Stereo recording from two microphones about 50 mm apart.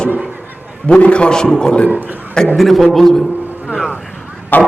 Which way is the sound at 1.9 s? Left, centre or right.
Right.